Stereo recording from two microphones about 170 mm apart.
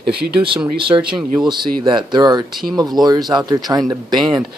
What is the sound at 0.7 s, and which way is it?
Speech, 30° right (ahead or behind).